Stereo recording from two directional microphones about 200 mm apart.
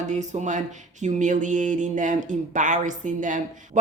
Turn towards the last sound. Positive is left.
turn(degrees=-40)  # may be behind; listen again after turning